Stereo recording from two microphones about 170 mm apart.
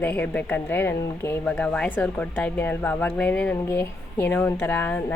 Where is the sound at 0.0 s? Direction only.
10° left (ahead or behind).